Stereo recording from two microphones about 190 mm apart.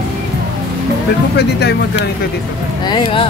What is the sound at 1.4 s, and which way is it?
Speech, 60° left (ahead or behind).